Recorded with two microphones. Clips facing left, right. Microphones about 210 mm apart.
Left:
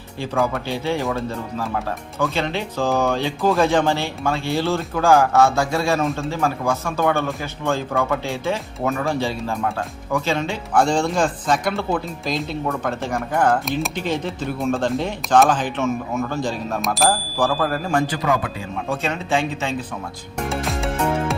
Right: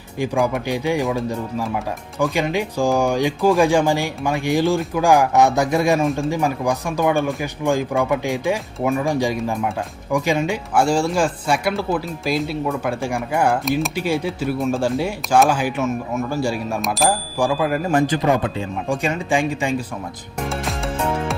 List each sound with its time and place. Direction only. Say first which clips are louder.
0.2 s speech: right 2 dB; 15° right (ahead or behind)
16.8 s speech: left 1 dB; centre (ahead or behind)
18.1 s speech: right 3 dB; 25° right (ahead or behind)
18.9 s speech: right 2 dB; 15° right (ahead or behind)
20.5 s music: left 2 dB; centre (ahead or behind)